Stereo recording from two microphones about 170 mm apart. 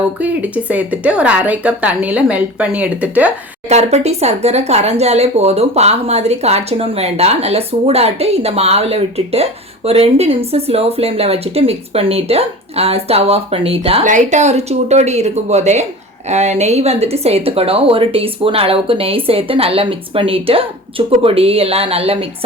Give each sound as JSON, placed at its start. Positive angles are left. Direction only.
{"t": 0.2, "sound": "a woman's voice", "side_deg": -10}
{"t": 3.7, "sound": "speech", "side_deg": -40}
{"t": 14.0, "sound": "speech", "side_deg": -45}